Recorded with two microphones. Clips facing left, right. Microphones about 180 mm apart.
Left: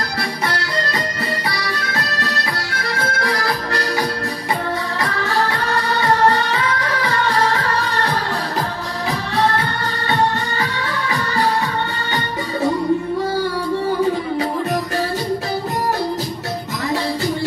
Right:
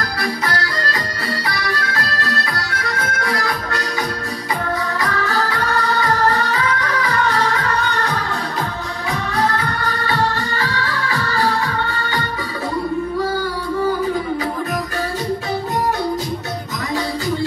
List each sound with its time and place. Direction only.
0.2 s accordion: 25° left (ahead or behind)
2.0 s accordion: 25° left (ahead or behind)
5.0 s music: 25° left (ahead or behind)
9.4 s music: 25° left (ahead or behind)